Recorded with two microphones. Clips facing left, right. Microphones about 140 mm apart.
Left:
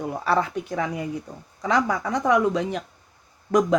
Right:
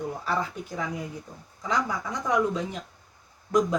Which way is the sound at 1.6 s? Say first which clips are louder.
Left 6 dB; 85° left.